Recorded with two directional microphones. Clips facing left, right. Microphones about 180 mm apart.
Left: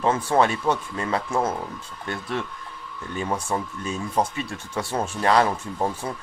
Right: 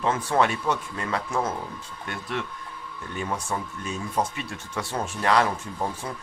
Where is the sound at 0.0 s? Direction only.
30° left (ahead or behind).